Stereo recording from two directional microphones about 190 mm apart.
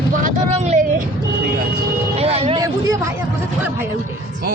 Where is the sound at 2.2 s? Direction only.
30° right (ahead or behind).